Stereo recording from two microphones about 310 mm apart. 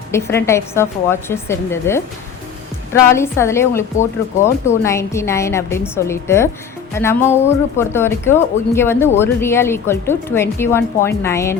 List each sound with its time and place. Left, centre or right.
0.1 s speech: centre